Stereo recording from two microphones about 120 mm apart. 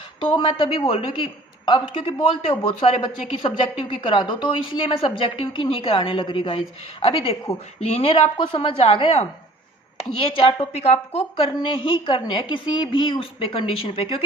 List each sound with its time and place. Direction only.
0.2 s a woman's voice: 45° left (ahead or behind)